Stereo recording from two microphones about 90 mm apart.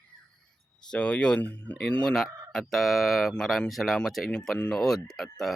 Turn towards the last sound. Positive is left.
turn(degrees=5)  # may be behind; listen again after turning